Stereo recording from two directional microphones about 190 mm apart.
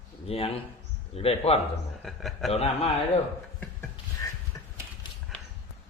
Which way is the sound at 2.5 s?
30° left (ahead or behind).